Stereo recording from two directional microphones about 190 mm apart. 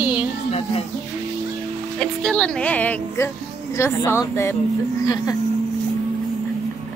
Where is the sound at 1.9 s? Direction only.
5° left (ahead or behind).